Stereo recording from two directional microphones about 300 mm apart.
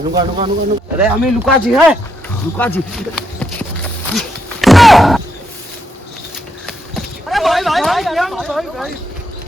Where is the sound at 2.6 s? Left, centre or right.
Centre.